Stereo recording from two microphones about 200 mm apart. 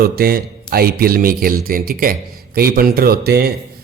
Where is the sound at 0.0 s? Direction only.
50° right (ahead or behind).